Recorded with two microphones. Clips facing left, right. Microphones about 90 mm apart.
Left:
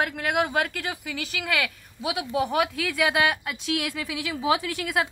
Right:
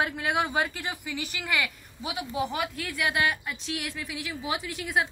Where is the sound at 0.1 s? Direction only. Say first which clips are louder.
Left 2 dB; 65° left (ahead or behind).